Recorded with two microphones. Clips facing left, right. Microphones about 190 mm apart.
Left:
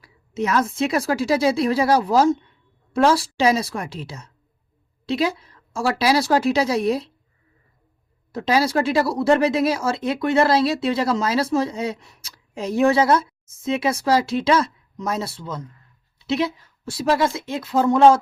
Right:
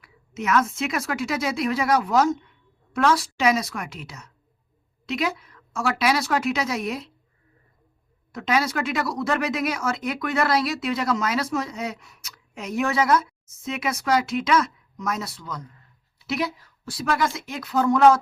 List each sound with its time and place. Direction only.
0.0 s a woman's voice: 30° left (ahead or behind)
8.3 s speech: 30° left (ahead or behind)